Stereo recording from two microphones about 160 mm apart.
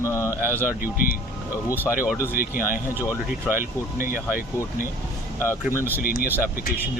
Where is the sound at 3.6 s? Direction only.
60° left (ahead or behind).